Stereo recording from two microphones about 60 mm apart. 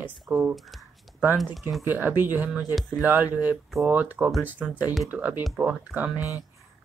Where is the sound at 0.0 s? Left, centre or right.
Right.